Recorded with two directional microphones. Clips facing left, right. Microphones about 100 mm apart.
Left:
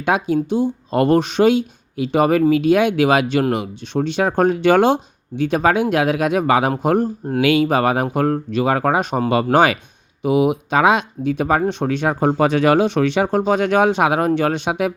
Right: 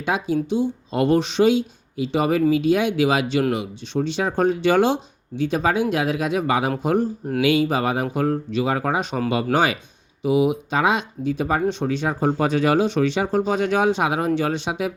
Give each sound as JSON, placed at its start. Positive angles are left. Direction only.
{"t": 0.0, "sound": "speech", "side_deg": 60}
{"t": 11.7, "sound": "speech", "side_deg": 60}